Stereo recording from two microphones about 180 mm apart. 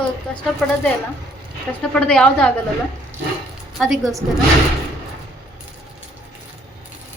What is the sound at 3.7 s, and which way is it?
Speech, centre (ahead or behind).